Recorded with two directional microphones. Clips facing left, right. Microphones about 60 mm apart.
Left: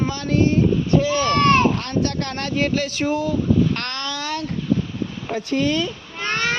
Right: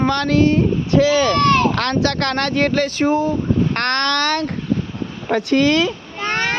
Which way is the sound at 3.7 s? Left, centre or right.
Right.